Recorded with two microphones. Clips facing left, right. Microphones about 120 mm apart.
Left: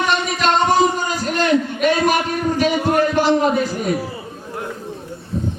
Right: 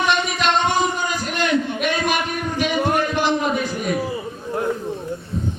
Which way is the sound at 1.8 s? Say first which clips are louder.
Left 5 dB; 40° left (ahead or behind).